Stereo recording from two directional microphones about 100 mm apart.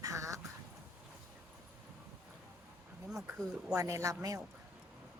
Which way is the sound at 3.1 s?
Centre (ahead or behind).